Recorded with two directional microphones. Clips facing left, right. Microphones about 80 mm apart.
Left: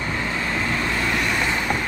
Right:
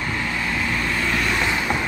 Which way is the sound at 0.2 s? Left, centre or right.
Left.